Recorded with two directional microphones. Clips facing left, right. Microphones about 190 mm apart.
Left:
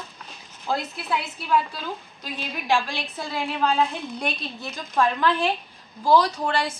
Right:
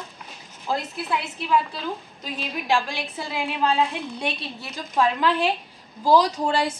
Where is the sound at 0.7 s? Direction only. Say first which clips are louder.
Even; 5° right (ahead or behind).